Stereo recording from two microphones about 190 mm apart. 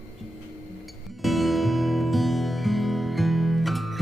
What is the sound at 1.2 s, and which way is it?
Music, centre (ahead or behind).